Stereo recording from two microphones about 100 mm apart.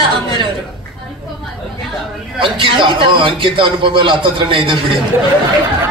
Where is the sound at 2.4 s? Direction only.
60° right (ahead or behind).